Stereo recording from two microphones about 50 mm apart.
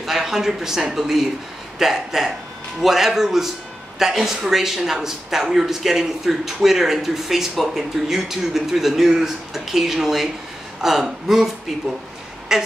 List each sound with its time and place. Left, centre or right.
0.0 s a man's voice: centre